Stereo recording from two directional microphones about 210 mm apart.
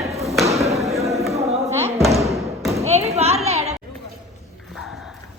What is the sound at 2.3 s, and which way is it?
Thump, centre (ahead or behind).